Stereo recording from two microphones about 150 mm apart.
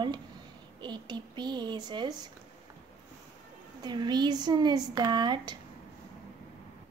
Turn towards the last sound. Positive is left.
turn(degrees=-30)  # may be behind; listen again after turning